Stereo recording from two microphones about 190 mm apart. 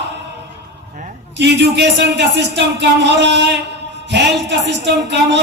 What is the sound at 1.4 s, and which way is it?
A man's voice, 60° right (ahead or behind).